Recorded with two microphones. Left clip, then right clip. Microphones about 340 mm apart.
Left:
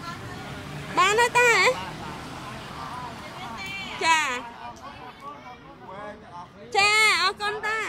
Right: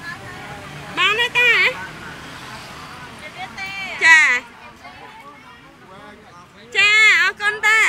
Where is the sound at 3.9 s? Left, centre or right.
Centre.